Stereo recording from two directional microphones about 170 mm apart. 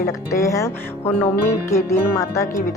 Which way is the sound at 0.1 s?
20° left (ahead or behind).